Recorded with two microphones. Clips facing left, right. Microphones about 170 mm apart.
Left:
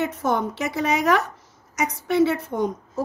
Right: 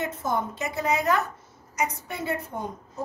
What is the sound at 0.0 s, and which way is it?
A woman's voice, 70° left (ahead or behind).